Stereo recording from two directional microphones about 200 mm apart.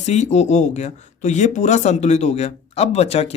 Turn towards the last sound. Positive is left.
turn(degrees=30)  # may be behind; listen again after turning